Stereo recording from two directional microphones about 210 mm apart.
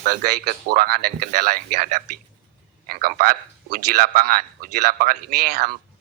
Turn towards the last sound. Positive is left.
turn(degrees=-45)  # may be behind; listen again after turning